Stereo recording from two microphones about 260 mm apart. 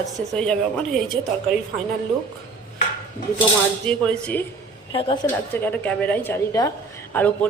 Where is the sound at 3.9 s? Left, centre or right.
Centre.